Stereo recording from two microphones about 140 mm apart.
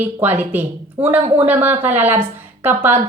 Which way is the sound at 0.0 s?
15° right (ahead or behind).